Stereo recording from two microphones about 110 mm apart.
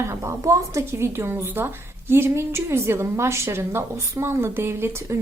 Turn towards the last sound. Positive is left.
turn(degrees=-25)  # may be behind; listen again after turning